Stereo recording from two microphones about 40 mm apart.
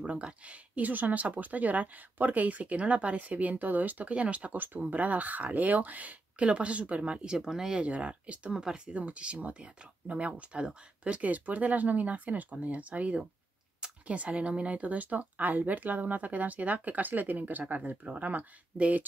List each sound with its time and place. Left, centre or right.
0.0 s speech: right
4.1 s speech: right
4.6 s speech: right
6.3 s speech: right
7.3 s speech: centre
7.8 s speech: right
8.5 s speech: right
10.6 s speech: right
11.1 s speech: right